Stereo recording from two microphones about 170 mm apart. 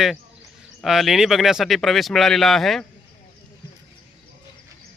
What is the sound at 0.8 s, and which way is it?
Speech, centre (ahead or behind).